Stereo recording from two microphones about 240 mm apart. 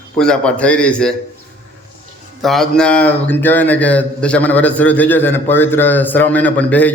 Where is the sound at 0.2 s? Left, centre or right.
Centre.